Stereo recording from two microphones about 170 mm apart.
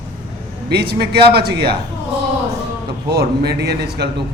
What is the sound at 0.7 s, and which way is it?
Speech, 70° right (ahead or behind).